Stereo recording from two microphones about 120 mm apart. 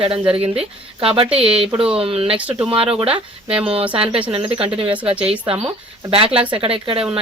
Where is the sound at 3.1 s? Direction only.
10° right (ahead or behind).